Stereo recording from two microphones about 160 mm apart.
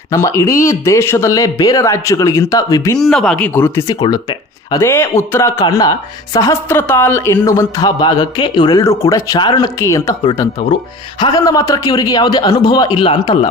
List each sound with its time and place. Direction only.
0.1 s speech: 20° left (ahead or behind)
3.0 s speech: 5° left (ahead or behind)
4.0 s speech: 25° left (ahead or behind)
11.2 s speech: 25° left (ahead or behind)